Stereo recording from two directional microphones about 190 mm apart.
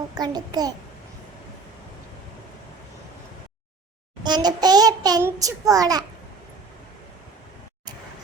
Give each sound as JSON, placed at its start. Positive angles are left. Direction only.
{"t": 0.2, "sound": "a child's voice", "side_deg": -20}
{"t": 4.2, "sound": "a child's voice", "side_deg": -20}